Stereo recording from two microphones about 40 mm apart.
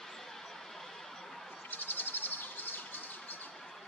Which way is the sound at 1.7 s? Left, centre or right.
Left.